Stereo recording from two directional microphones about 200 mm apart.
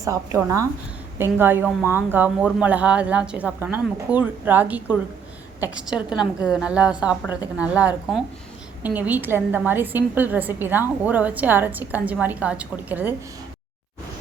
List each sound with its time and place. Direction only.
0.0 s a woman's voice: 15° right (ahead or behind)